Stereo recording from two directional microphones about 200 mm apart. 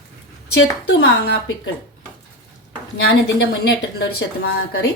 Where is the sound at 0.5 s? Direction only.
60° left (ahead or behind).